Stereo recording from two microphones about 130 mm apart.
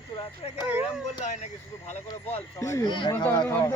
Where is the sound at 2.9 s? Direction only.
35° left (ahead or behind).